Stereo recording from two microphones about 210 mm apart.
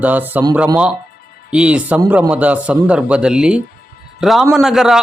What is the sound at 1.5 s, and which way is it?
A man's voice, 5° right (ahead or behind).